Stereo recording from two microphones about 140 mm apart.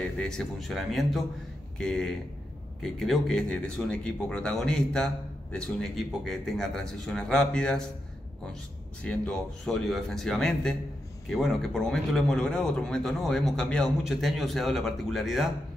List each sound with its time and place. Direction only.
0.2 s speech: 5° left (ahead or behind)
9.0 s speech: 10° left (ahead or behind)